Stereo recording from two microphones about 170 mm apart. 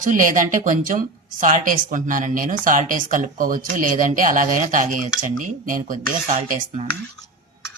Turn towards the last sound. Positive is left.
turn(degrees=-45)  # may be behind; listen again after turning